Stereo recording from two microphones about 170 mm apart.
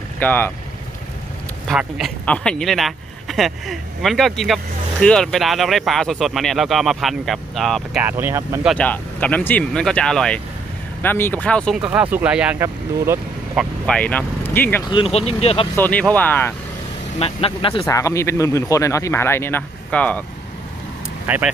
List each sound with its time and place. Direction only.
0.2 s speech: 10° left (ahead or behind)
1.7 s speech: centre (ahead or behind)
8.0 s speech: 10° right (ahead or behind)
8.7 s speech: 10° left (ahead or behind)
11.9 s speech: 10° right (ahead or behind)
13.6 s speech: 5° left (ahead or behind)
14.9 s speech: 30° left (ahead or behind)
15.7 s speech: 10° left (ahead or behind)
17.2 s speech: 35° left (ahead or behind)
17.8 s speech: 20° left (ahead or behind)
21.3 s speech: 10° right (ahead or behind)